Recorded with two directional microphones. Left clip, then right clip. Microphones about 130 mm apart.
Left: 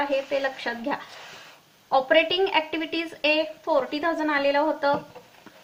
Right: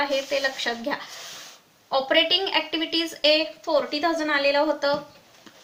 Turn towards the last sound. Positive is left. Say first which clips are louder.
# right 1 dB
turn(degrees=30)  # may be behind; listen again after turning